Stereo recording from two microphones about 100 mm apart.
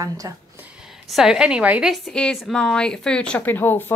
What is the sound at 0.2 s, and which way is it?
Speech, 40° right (ahead or behind).